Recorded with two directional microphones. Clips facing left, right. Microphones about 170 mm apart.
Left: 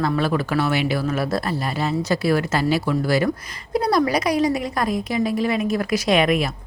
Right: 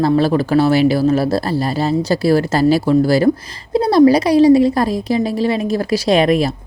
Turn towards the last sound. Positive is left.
turn(degrees=-35)  # may be behind; listen again after turning